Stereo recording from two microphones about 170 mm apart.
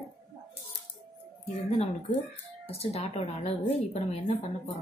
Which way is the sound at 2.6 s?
35° left (ahead or behind).